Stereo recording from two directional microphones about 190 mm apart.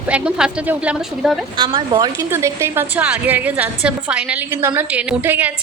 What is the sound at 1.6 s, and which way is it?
A woman's voice, 25° right (ahead or behind).